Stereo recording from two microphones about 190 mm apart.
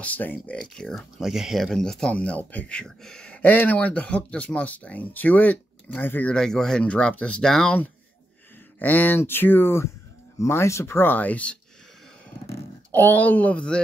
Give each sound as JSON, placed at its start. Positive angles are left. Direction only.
{"t": 0.0, "sound": "speech", "side_deg": 10}
{"t": 12.9, "sound": "speech", "side_deg": 10}